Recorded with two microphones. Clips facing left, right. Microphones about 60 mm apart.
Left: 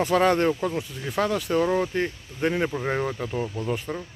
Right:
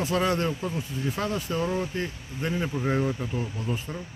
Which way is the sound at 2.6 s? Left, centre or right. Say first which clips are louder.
Left 1 dB; left.